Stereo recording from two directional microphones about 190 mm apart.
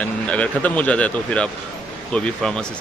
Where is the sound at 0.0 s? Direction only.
5° left (ahead or behind).